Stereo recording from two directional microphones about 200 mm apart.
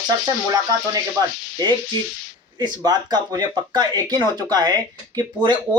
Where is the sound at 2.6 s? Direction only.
20° right (ahead or behind).